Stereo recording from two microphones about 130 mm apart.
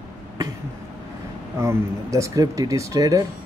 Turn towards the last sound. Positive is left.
turn(degrees=-25)  # may be behind; listen again after turning